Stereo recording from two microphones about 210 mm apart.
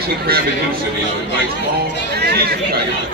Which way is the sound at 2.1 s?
50° right (ahead or behind).